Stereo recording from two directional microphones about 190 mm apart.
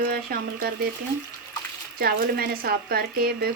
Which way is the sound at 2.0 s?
55° right (ahead or behind).